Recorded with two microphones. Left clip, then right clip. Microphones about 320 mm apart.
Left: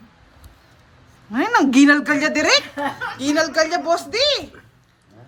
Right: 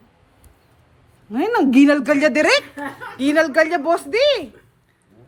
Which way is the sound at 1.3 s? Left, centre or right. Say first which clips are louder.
Even; centre.